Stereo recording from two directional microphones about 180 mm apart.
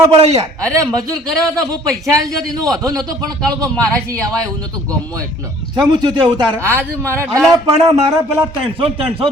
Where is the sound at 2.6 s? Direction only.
20° right (ahead or behind).